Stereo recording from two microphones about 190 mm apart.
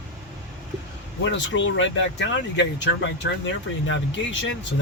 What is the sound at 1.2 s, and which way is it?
Speech, 75° left (ahead or behind).